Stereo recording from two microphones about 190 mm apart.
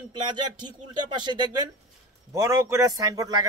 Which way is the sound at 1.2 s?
25° right (ahead or behind).